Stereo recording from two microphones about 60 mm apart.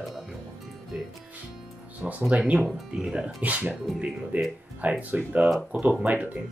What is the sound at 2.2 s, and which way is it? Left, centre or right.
Speech, centre.